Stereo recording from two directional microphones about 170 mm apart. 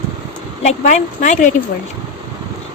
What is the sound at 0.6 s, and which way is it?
Speech, 45° left (ahead or behind).